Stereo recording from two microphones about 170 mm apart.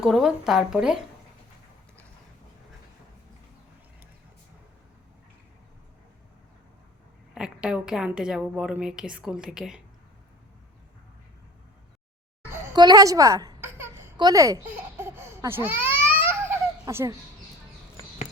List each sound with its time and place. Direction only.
0.0 s a woman's voice: centre (ahead or behind)
7.3 s a woman's voice: 5° right (ahead or behind)
12.6 s speech: 25° right (ahead or behind)
16.0 s babbling: 10° right (ahead or behind)